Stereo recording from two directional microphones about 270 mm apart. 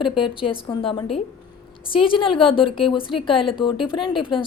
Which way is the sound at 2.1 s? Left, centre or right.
Centre.